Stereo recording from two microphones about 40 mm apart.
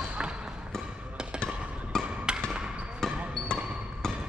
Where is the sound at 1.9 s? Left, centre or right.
Centre.